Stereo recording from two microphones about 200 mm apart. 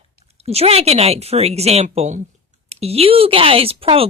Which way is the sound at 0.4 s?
30° right (ahead or behind).